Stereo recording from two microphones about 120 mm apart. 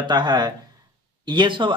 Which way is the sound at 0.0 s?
40° right (ahead or behind).